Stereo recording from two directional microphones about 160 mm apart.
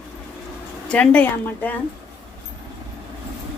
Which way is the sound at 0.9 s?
5° left (ahead or behind).